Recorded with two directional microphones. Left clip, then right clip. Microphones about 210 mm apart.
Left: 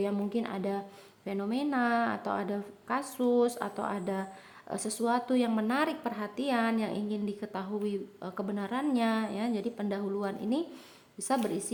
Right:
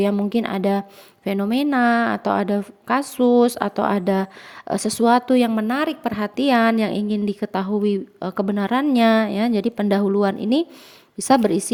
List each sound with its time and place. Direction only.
0.0 s a woman's voice: 40° right (ahead or behind)